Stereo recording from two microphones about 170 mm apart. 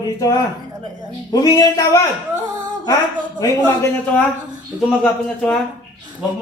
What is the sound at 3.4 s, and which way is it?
A man's voice, 15° left (ahead or behind).